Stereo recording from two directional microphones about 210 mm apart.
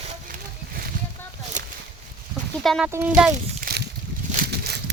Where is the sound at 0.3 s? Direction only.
45° right (ahead or behind).